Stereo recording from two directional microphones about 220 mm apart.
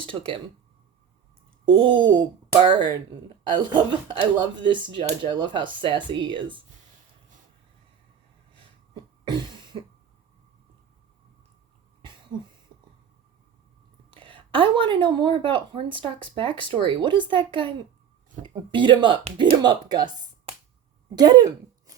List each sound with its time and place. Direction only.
0.0 s a woman's voice: 25° right (ahead or behind)
1.7 s a woman's voice: 20° right (ahead or behind)
9.2 s cough: 20° right (ahead or behind)
14.1 s a woman's voice: 25° right (ahead or behind)